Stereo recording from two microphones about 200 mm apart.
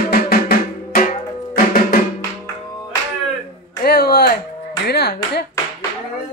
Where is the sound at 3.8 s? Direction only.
50° left (ahead or behind).